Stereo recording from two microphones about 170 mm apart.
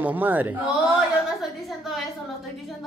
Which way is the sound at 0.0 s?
10° right (ahead or behind).